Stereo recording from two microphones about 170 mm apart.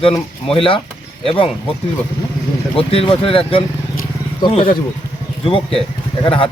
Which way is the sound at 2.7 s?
35° left (ahead or behind).